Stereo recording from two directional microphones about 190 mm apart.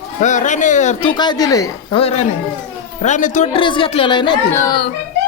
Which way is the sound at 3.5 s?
25° left (ahead or behind).